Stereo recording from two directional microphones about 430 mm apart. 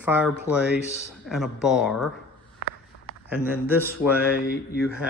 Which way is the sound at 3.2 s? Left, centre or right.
Centre.